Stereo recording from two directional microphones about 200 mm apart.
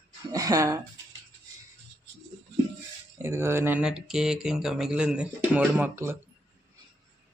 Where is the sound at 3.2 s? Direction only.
10° right (ahead or behind).